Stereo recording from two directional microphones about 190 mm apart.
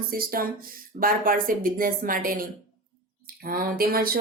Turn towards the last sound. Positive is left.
turn(degrees=-50)  # may be behind; listen again after turning